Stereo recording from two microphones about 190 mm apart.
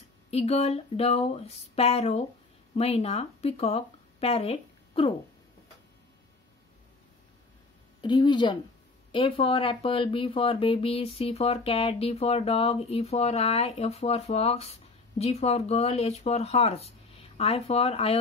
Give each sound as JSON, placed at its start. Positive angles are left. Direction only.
{"t": 0.3, "sound": "speech", "side_deg": 35}
{"t": 8.0, "sound": "a woman's voice", "side_deg": 25}